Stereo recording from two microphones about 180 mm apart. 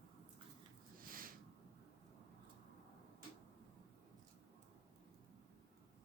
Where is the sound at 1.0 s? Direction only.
50° right (ahead or behind).